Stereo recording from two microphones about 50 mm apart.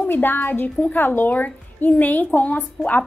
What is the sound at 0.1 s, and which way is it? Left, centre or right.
A woman's voice, left.